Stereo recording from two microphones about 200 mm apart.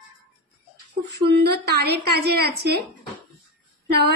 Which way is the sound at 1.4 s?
55° right (ahead or behind).